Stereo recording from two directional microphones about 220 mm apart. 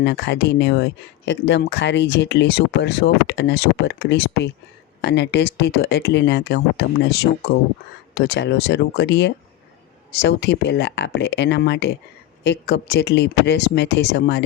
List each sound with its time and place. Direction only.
0.0 s speech: 50° left (ahead or behind)